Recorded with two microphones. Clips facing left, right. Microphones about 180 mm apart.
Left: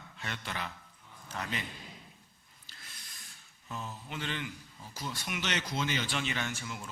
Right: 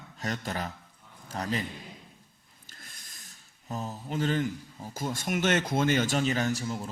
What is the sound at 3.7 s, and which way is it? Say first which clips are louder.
A man's voice: right 6 dB; 40° right (ahead or behind).